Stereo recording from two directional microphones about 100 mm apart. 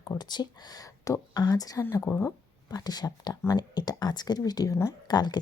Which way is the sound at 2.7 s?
40° left (ahead or behind).